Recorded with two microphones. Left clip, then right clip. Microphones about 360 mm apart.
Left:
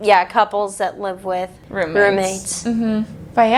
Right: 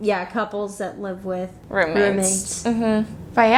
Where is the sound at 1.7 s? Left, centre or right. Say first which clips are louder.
Right 1 dB; right.